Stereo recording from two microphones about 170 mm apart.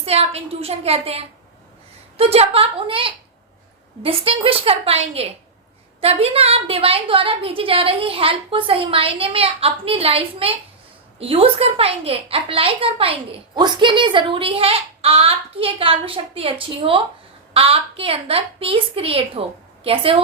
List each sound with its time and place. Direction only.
0.0 s speech: 35° right (ahead or behind)